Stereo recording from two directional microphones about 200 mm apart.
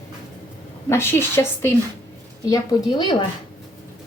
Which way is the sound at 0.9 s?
10° left (ahead or behind).